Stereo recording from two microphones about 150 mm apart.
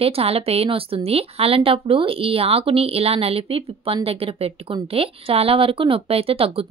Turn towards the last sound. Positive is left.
turn(degrees=-40)  # may be behind; listen again after turning